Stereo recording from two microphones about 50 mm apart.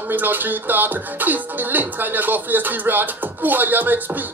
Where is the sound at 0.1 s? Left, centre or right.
Right.